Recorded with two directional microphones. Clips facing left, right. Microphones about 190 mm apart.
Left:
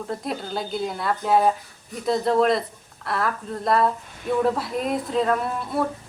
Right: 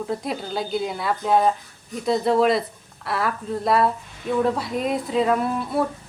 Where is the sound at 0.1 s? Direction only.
Centre (ahead or behind).